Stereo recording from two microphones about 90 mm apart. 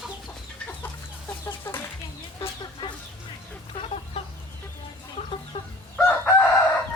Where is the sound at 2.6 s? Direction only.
55° left (ahead or behind).